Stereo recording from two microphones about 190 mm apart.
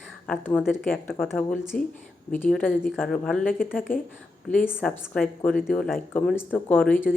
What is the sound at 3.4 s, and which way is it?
Speech, 50° left (ahead or behind).